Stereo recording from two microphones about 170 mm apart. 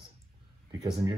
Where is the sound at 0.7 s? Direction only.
25° right (ahead or behind).